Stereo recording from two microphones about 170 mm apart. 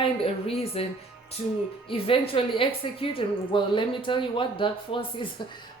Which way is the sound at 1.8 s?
30° left (ahead or behind).